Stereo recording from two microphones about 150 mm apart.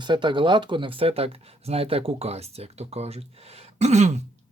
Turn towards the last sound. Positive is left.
turn(degrees=-50)  # may be behind; listen again after turning